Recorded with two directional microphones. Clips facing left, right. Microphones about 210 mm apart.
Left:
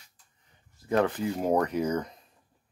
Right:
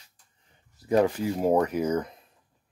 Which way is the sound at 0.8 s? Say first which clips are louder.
Right 3 dB; 10° right (ahead or behind).